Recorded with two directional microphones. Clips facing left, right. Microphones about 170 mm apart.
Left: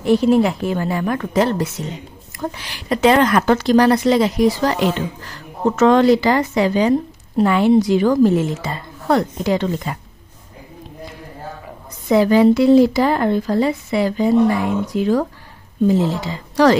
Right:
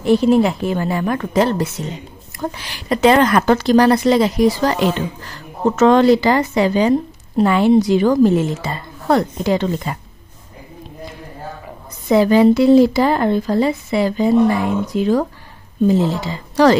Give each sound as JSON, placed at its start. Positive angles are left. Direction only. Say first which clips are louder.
{"t": 0.0, "sound": "speech", "louder": "right 1 dB", "side_deg": -25}
{"t": 12.1, "sound": "speech", "louder": "right 1 dB", "side_deg": -25}